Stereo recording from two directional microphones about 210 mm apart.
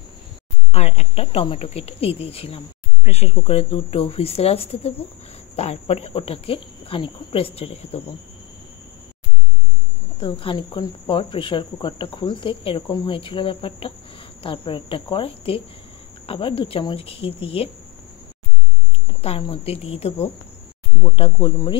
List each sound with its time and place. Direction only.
0.7 s speech: 30° left (ahead or behind)
10.1 s speech: 25° left (ahead or behind)
19.0 s speech: 25° left (ahead or behind)